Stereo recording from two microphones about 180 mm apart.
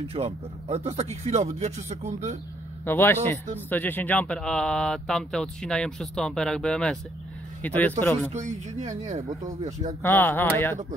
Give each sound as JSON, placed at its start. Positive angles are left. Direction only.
{"t": 0.1, "sound": "speech", "side_deg": -35}
{"t": 2.8, "sound": "speech", "side_deg": 10}
{"t": 8.3, "sound": "speech", "side_deg": -40}
{"t": 10.0, "sound": "speech", "side_deg": 10}